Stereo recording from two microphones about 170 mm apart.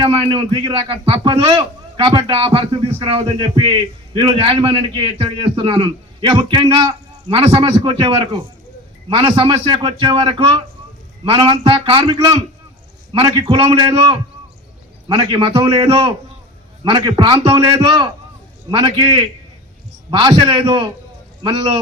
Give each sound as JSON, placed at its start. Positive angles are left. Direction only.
{"t": 0.0, "sound": "a man's voice", "side_deg": -30}